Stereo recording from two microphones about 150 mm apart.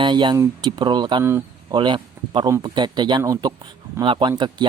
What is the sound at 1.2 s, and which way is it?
Speech, 15° right (ahead or behind).